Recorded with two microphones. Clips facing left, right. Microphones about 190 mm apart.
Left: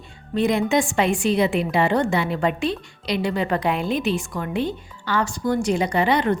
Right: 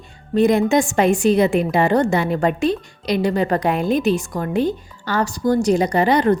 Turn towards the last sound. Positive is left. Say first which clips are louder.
# right 4 dB
turn(degrees=-40)  # may be behind; listen again after turning